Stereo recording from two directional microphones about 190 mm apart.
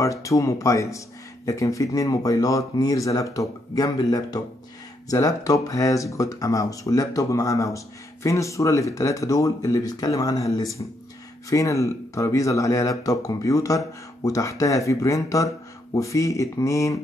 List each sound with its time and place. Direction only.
0.0 s speech: 15° left (ahead or behind)